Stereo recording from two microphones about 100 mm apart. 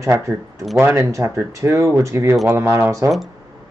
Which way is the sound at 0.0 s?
30° right (ahead or behind).